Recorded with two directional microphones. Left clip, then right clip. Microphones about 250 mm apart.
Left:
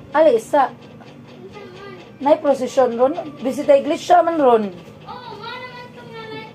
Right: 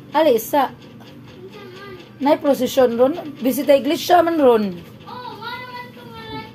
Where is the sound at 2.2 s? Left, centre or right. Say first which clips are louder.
Left 1 dB; right.